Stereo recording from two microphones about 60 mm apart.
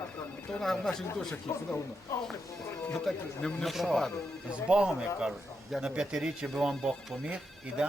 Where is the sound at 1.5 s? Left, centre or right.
Left.